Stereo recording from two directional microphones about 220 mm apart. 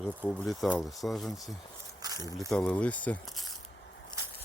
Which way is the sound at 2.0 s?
15° right (ahead or behind).